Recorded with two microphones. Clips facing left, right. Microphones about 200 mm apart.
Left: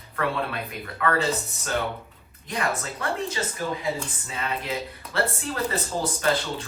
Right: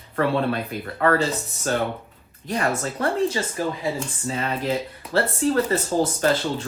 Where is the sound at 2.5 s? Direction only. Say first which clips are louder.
Right 4 dB; 40° right (ahead or behind).